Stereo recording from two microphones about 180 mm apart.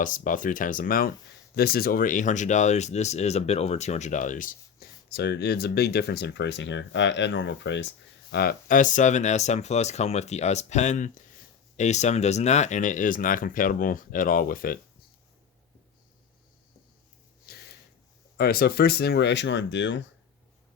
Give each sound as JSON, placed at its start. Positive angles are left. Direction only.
{"t": 0.0, "sound": "speech", "side_deg": 45}
{"t": 8.3, "sound": "speech", "side_deg": 60}
{"t": 17.5, "sound": "a sound", "side_deg": 55}
{"t": 18.3, "sound": "speech", "side_deg": 60}